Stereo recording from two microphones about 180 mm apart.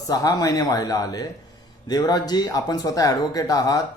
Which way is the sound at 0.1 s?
20° left (ahead or behind).